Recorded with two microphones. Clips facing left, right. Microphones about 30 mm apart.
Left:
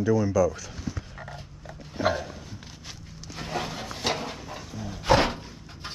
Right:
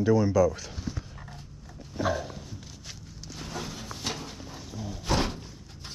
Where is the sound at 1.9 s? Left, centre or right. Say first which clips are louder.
Left 3 dB; left.